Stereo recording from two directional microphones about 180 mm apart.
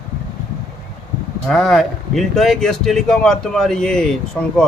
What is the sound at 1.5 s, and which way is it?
Speech, centre (ahead or behind).